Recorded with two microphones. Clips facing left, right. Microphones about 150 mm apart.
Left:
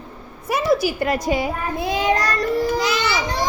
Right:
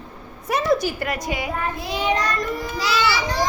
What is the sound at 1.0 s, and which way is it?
Child singing, 30° left (ahead or behind).